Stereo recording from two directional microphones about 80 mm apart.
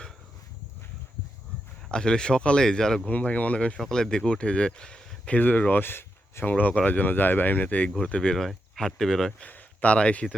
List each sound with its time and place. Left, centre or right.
1.9 s speech: centre
3.1 s speech: centre
3.8 s speech: centre; by 6.5 s left
6.5 s speech: centre
7.9 s speech: centre
9.4 s speech: centre